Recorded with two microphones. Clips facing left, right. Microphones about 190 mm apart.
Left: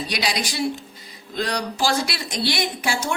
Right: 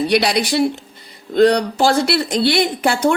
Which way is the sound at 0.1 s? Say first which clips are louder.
Right 10 dB; 60° right (ahead or behind).